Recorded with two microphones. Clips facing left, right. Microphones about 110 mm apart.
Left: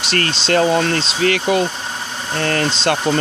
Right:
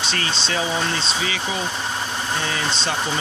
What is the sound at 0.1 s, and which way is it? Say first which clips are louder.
Speech: left 12 dB; 70° left (ahead or behind).